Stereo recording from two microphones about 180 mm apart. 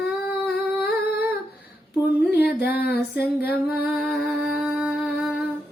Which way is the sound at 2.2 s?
10° right (ahead or behind).